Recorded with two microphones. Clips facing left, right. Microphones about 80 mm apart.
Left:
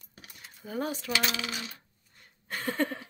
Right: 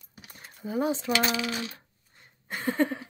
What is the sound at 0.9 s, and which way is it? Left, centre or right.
Speech, right.